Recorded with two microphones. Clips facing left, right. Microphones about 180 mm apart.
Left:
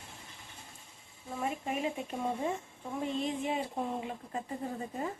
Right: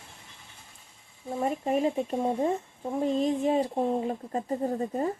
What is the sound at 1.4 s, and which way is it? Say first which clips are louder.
Speech: right 8 dB; 40° right (ahead or behind).